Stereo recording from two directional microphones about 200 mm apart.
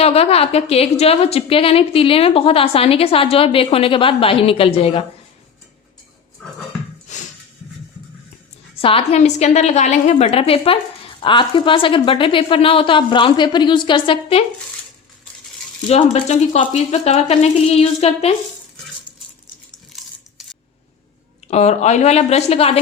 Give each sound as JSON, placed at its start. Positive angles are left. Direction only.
{"t": 0.0, "sound": "a woman's voice", "side_deg": 30}
{"t": 7.1, "sound": "a sound", "side_deg": 35}
{"t": 8.8, "sound": "a woman's voice", "side_deg": 25}
{"t": 15.9, "sound": "speech", "side_deg": 35}
{"t": 21.4, "sound": "speech", "side_deg": 35}